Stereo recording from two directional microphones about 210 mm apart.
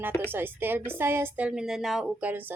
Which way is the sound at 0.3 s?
10° right (ahead or behind).